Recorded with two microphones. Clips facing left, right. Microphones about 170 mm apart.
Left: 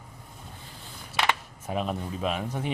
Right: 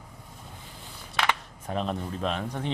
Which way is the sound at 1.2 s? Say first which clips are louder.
Left 1 dB; 5° left (ahead or behind).